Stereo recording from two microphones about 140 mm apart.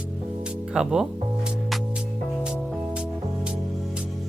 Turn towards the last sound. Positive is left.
turn(degrees=-5)  # may be behind; listen again after turning